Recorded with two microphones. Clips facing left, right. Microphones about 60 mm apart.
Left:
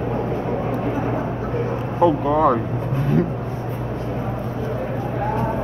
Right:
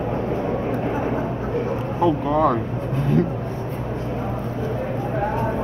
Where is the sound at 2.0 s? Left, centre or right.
Centre.